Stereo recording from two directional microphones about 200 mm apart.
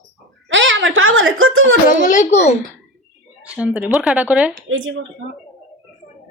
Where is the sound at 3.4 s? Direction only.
5° right (ahead or behind).